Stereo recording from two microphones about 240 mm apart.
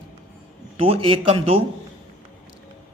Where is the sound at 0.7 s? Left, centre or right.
Right.